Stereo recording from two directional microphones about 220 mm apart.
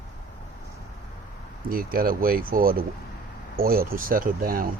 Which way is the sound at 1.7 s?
40° right (ahead or behind).